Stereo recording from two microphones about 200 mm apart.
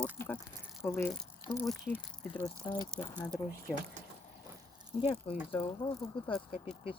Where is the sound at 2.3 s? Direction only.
20° left (ahead or behind).